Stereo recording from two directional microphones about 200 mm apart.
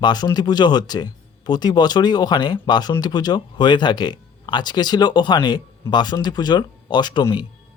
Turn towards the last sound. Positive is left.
turn(degrees=20)  # may be behind; listen again after turning